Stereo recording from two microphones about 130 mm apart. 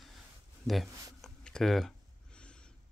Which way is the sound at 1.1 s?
5° left (ahead or behind).